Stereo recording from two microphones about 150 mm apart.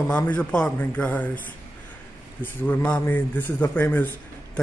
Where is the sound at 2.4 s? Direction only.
10° left (ahead or behind).